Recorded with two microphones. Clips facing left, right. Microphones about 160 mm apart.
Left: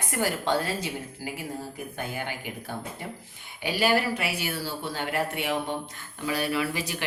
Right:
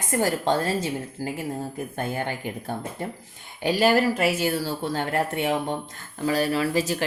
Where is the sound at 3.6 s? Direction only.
40° right (ahead or behind).